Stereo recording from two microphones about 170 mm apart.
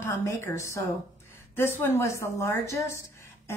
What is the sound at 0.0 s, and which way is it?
Speech, 15° left (ahead or behind).